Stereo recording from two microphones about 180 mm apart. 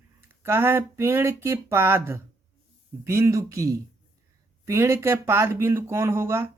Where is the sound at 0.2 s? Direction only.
15° right (ahead or behind).